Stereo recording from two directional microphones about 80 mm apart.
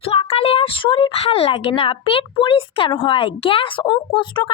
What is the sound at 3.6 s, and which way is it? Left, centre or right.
Speech, left.